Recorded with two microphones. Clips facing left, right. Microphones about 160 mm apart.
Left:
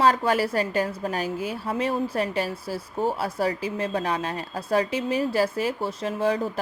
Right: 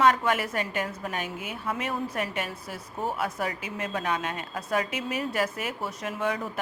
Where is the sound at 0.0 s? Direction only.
35° left (ahead or behind).